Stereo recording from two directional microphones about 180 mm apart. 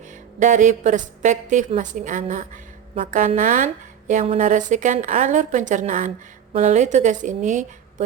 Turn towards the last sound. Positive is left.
turn(degrees=-45)  # may be behind; listen again after turning